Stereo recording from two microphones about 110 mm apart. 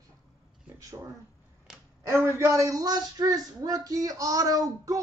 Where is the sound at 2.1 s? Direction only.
25° right (ahead or behind).